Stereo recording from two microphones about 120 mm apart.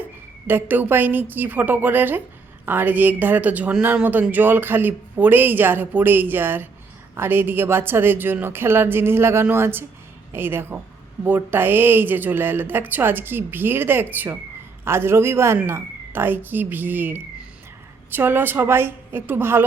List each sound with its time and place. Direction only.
0.4 s speech: 15° right (ahead or behind)